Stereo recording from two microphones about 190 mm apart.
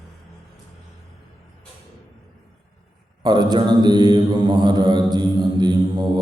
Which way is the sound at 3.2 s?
20° right (ahead or behind).